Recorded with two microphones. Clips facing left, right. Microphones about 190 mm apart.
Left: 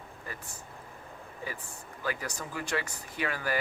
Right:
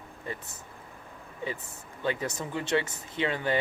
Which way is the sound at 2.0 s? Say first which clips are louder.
Right 5 dB; 25° right (ahead or behind).